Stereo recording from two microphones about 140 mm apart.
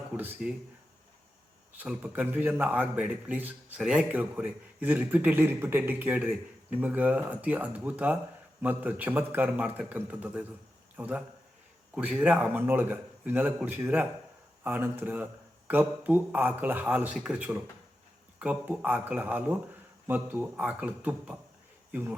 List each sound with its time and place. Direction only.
0.2 s a man's voice: 10° right (ahead or behind)
1.7 s a man's voice: 10° right (ahead or behind)